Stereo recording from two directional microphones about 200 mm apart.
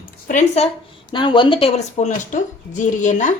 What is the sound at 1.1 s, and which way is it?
A woman's voice, 25° left (ahead or behind).